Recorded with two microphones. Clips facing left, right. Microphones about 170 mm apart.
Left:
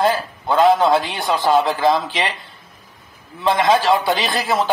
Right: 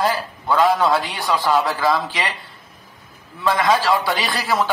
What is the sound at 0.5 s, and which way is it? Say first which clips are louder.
A man's voice: left 3 dB; 25° left (ahead or behind).